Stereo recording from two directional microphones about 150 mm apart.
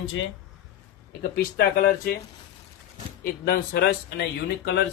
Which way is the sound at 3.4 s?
90° left.